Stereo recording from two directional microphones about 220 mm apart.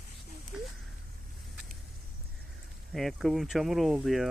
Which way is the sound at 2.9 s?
Centre (ahead or behind).